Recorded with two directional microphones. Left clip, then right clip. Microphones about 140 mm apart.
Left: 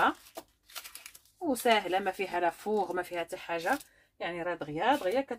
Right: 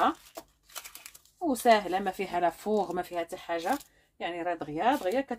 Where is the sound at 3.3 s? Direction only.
Centre (ahead or behind).